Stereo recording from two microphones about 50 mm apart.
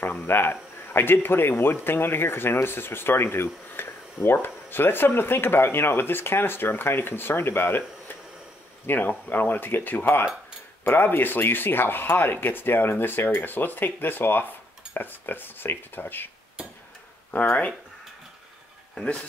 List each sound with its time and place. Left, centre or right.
0.3 s speech: left
17.3 s speech: left